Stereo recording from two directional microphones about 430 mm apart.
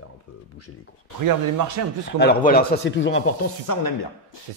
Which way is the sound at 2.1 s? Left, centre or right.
Left.